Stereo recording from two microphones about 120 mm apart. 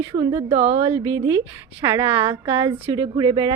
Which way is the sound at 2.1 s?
45° right (ahead or behind).